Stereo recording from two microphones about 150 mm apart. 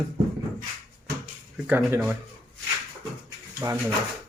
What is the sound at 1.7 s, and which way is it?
Speech, 15° right (ahead or behind).